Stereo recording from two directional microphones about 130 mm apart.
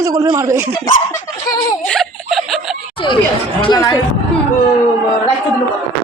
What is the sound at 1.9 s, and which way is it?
Giggle, centre (ahead or behind).